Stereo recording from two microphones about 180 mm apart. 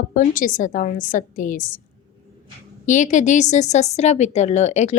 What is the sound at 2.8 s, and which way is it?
A woman's voice, 45° left (ahead or behind).